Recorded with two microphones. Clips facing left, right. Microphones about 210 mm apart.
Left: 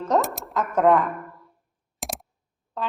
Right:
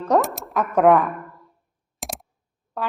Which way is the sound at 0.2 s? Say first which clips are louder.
Right 2 dB; centre (ahead or behind).